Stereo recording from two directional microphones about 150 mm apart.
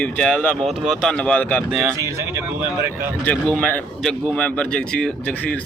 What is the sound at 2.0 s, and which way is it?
Speech, 20° right (ahead or behind).